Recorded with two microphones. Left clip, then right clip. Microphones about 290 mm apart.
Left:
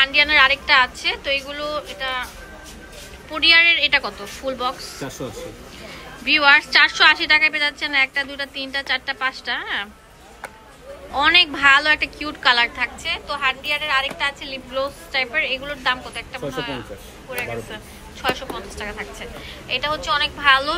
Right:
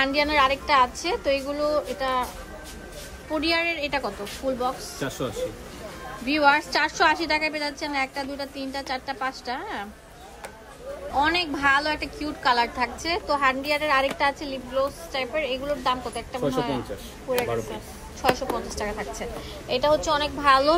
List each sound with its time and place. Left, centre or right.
0.0 s a woman's voice: centre
3.3 s a woman's voice: centre
4.9 s speech: centre
6.2 s a woman's voice: centre
11.1 s a woman's voice: centre
18.2 s a woman's voice: centre